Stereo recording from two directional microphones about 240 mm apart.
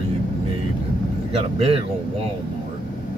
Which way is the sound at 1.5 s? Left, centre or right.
Right.